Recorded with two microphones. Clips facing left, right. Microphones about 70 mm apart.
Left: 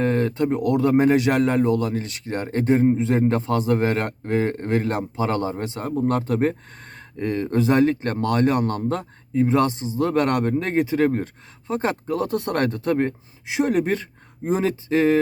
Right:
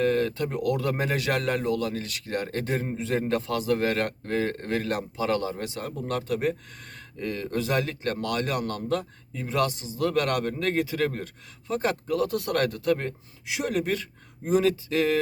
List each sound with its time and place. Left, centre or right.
0.0 s speech: left